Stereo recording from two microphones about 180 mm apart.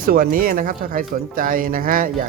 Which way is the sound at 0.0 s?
50° right (ahead or behind).